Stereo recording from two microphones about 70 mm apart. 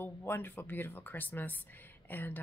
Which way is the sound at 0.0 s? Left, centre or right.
Left.